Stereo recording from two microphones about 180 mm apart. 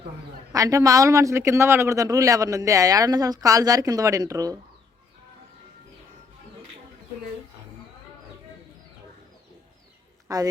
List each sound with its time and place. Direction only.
0.5 s speech: 20° right (ahead or behind)
10.2 s a woman's voice: 20° right (ahead or behind)